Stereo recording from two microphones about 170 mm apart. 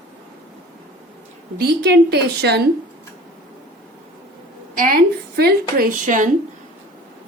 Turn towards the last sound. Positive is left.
turn(degrees=-50)  # may be behind; listen again after turning